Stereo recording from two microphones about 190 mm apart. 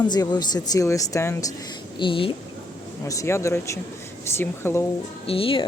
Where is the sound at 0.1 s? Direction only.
20° left (ahead or behind).